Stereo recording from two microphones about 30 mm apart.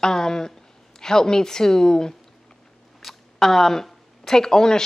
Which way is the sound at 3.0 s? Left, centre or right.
Centre.